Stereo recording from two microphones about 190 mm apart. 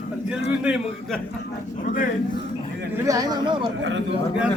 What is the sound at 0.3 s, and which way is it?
Speech, 5° right (ahead or behind).